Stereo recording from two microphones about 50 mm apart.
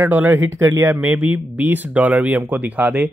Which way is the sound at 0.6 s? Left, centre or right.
Right.